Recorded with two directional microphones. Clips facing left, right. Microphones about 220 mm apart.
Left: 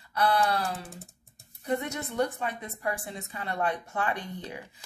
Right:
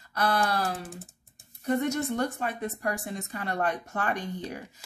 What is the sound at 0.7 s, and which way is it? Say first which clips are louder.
Speech: right 3 dB; centre (ahead or behind).